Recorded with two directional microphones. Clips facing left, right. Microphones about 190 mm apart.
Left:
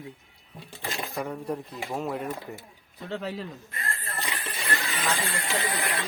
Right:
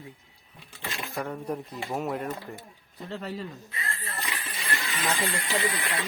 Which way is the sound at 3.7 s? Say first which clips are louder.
Left 1 dB; 50° left (ahead or behind).